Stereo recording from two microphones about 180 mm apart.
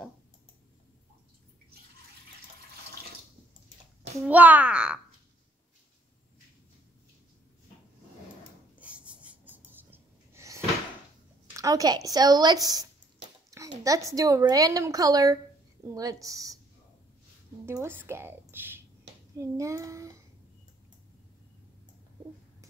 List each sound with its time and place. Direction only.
4.2 s a child's voice: 10° right (ahead or behind)
8.7 s a sound: 5° right (ahead or behind)
11.5 s a woman's voice: 20° right (ahead or behind)
17.6 s a woman's voice: 15° right (ahead or behind)